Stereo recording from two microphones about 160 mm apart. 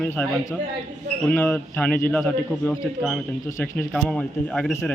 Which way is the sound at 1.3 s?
15° left (ahead or behind).